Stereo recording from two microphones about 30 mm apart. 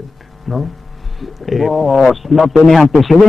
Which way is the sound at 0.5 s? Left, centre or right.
Centre.